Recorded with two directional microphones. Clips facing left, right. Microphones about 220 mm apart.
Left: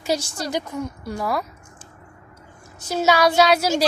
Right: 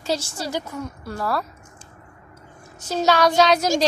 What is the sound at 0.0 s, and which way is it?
Speech, 15° left (ahead or behind).